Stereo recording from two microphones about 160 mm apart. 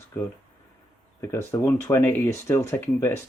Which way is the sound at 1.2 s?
15° left (ahead or behind).